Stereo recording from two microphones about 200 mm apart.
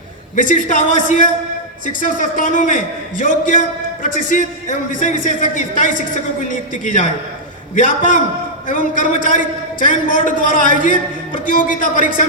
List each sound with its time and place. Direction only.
0.3 s a man's voice: 40° left (ahead or behind)